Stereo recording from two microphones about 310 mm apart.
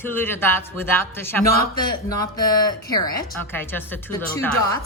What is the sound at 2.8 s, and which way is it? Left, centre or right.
Speech, centre.